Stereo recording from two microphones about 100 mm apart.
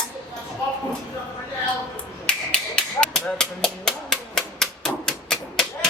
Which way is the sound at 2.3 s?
10° left (ahead or behind).